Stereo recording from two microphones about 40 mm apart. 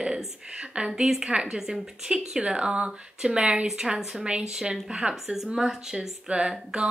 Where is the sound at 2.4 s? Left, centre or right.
Right.